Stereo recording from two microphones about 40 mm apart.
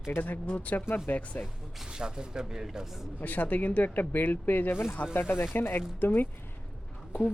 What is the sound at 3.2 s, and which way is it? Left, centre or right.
Speech, left.